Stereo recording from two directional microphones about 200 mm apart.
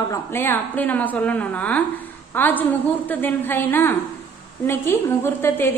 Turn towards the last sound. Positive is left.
turn(degrees=10)  # may be behind; listen again after turning